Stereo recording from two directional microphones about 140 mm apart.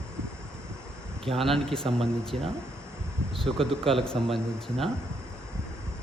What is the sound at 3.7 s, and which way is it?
Speech, centre (ahead or behind).